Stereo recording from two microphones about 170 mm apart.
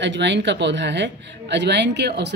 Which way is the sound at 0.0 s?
90° right.